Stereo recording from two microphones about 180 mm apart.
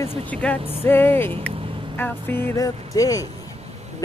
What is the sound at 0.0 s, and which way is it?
Speech, 10° left (ahead or behind).